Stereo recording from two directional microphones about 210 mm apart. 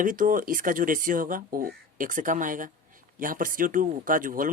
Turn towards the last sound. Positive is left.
turn(degrees=-40)  # may be behind; listen again after turning